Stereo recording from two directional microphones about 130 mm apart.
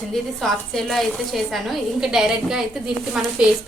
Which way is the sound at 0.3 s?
Centre (ahead or behind).